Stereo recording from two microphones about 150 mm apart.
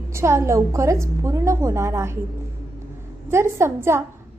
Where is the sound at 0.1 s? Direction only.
20° right (ahead or behind).